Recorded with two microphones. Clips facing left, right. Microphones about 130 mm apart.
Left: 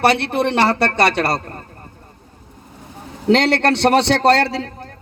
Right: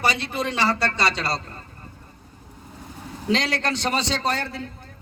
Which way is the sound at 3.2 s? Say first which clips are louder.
Left 9 dB; 65° left (ahead or behind).